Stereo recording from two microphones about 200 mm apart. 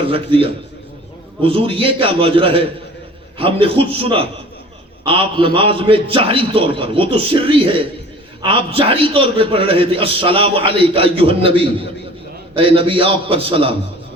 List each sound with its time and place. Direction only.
0.1 s a man's voice: 25° right (ahead or behind)